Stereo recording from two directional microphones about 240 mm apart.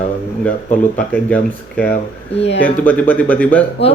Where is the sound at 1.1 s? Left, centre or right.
Centre.